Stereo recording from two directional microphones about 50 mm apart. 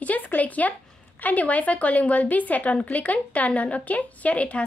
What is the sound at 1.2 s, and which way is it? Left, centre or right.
A woman's voice, left.